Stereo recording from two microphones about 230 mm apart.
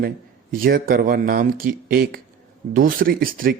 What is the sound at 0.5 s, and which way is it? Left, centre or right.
A man's voice, right.